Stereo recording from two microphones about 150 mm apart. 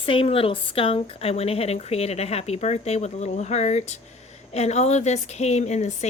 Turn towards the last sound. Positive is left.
turn(degrees=50)  # may be behind; listen again after turning